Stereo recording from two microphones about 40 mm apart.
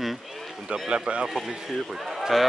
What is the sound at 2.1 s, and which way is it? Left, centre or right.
Run, centre.